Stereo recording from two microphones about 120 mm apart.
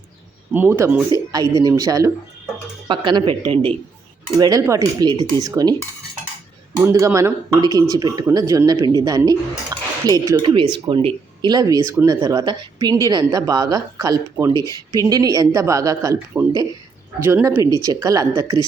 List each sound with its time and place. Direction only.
0.5 s speech: 20° right (ahead or behind)
1.3 s speech: 30° right (ahead or behind)
2.8 s speech: 40° right (ahead or behind)
4.4 s speech: 30° right (ahead or behind)
6.8 s speech: 25° right (ahead or behind)
10.4 s speech: 45° right (ahead or behind); by 16.4 s 30° right (ahead or behind)
17.2 s speech: 15° right (ahead or behind); by 18.6 s 35° right (ahead or behind)